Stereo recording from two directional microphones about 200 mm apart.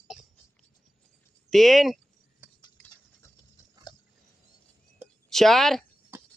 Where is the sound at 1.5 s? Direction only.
Centre (ahead or behind).